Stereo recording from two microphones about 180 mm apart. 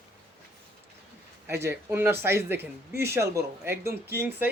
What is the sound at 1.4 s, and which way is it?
Speech, 10° right (ahead or behind).